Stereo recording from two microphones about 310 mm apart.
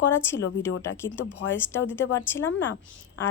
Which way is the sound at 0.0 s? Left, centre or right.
Centre.